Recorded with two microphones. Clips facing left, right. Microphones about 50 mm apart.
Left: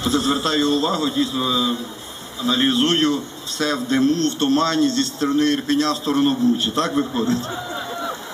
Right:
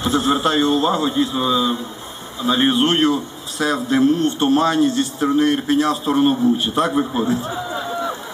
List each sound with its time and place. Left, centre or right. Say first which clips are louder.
0.0 s speech: right 2 dB; centre